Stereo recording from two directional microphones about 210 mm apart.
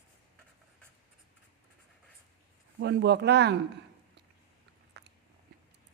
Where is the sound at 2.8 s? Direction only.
55° right (ahead or behind).